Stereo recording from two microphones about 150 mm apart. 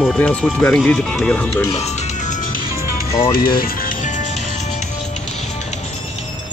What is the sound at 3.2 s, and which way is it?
Music, 75° left (ahead or behind).